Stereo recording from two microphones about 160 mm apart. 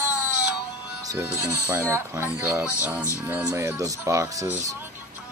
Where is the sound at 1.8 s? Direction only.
15° right (ahead or behind).